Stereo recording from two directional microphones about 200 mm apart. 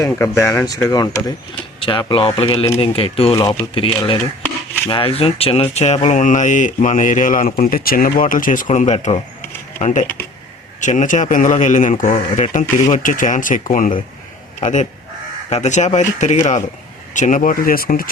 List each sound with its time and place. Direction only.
0.0 s speech: 15° left (ahead or behind); by 18.1 s 45° left (ahead or behind)